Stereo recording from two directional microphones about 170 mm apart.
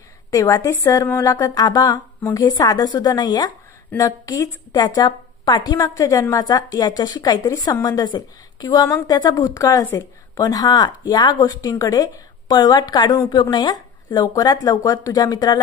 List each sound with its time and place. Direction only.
0.3 s a woman's voice: 20° left (ahead or behind)